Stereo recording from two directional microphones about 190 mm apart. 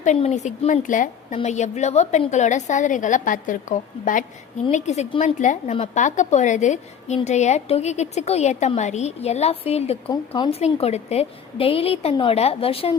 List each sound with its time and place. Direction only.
0.0 s a woman's voice: 35° left (ahead or behind)
10.1 s speech: 20° left (ahead or behind)
10.6 s a woman's voice: 35° left (ahead or behind)